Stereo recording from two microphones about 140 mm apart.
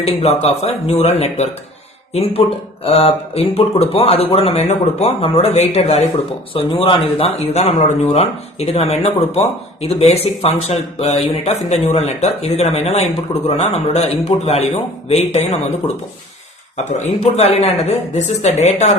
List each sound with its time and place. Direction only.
0.0 s speech: 45° left (ahead or behind)
16.7 s speech: 50° left (ahead or behind)